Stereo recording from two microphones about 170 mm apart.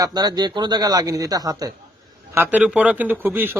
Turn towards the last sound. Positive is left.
turn(degrees=-10)  # may be behind; listen again after turning